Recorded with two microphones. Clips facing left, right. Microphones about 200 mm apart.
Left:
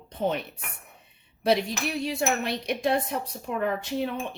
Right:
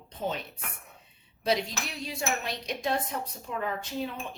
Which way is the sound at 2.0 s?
65° left (ahead or behind).